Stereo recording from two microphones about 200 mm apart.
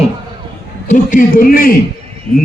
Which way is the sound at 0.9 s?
45° left (ahead or behind).